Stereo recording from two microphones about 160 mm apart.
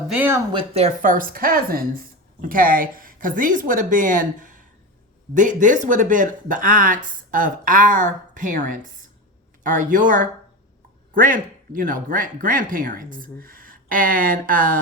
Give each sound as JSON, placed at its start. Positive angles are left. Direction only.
{"t": 0.1, "sound": "speech", "side_deg": -10}
{"t": 0.5, "sound": "speech", "side_deg": -40}